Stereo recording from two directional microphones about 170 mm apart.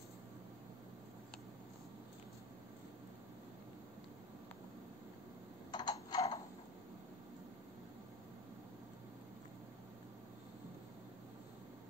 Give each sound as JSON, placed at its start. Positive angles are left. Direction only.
{"t": 5.7, "sound": "coin", "side_deg": 25}